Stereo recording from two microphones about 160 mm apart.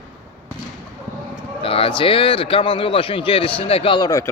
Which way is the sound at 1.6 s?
35° left (ahead or behind).